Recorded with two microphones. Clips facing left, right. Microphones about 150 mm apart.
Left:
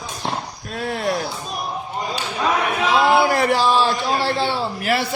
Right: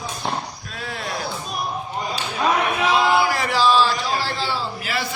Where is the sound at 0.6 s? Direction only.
45° left (ahead or behind).